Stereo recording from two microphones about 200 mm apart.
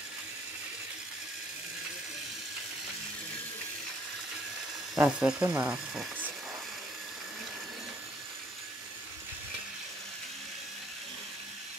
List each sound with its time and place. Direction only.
4.9 s speech: 10° right (ahead or behind)